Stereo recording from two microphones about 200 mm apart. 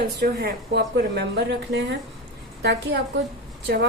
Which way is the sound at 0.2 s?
50° right (ahead or behind).